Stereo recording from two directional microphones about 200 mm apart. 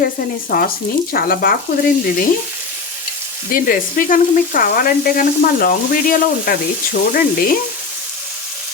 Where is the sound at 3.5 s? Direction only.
45° left (ahead or behind).